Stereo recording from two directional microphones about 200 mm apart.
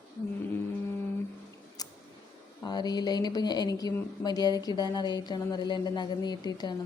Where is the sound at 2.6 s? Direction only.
20° left (ahead or behind).